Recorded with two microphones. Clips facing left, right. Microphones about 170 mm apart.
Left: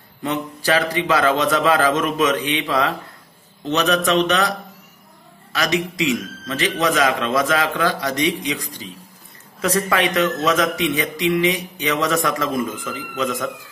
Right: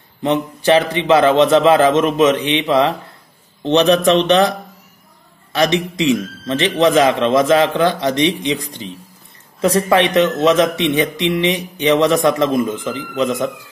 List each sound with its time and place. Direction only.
0.2 s speech: 25° right (ahead or behind)